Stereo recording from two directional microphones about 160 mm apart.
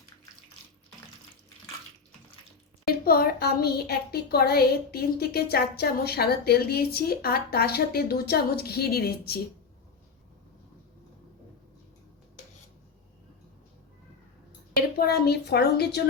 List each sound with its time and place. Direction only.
2.8 s a woman's voice: 70° left (ahead or behind)
14.9 s speech: 80° left